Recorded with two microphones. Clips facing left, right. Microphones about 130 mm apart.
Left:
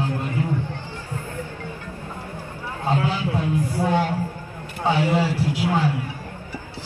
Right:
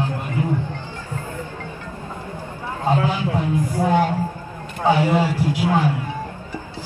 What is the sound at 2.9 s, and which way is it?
A man's voice, 15° right (ahead or behind).